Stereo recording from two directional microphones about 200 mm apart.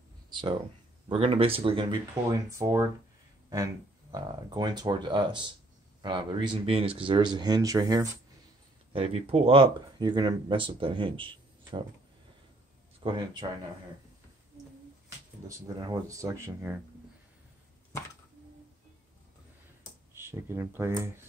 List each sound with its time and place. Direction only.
0.3 s a sound: 25° right (ahead or behind)
1.0 s speech: 30° right (ahead or behind)
2.5 s speech: 15° right (ahead or behind)
8.9 s speech: 30° right (ahead or behind)
13.0 s speech: 25° right (ahead or behind)
15.4 s speech: 15° right (ahead or behind)
20.2 s speech: 10° right (ahead or behind)